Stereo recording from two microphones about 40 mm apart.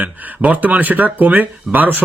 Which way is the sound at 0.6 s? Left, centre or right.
Right.